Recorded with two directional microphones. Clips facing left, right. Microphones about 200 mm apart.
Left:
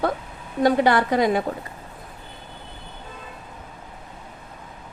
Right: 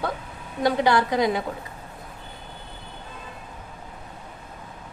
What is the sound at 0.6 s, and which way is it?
Speech, 50° left (ahead or behind).